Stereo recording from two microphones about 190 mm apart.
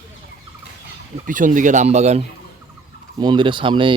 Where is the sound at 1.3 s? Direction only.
45° right (ahead or behind).